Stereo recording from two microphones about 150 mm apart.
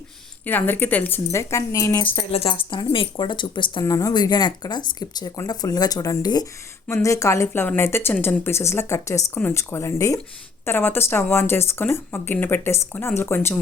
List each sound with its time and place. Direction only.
0.4 s a woman's voice: 10° left (ahead or behind)
2.3 s a woman's voice: 40° left (ahead or behind); by 13.6 s 15° left (ahead or behind)